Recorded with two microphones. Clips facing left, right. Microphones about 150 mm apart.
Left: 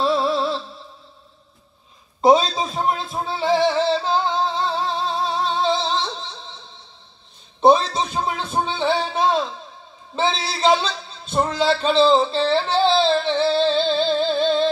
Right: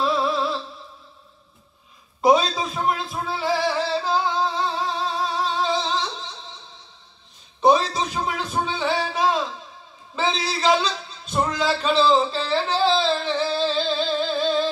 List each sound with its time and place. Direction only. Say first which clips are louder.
0.0 s music: left 2 dB; 30° left (ahead or behind)
2.2 s music: left 2 dB; 25° left (ahead or behind)
7.6 s a sound: left 3 dB; 30° left (ahead or behind)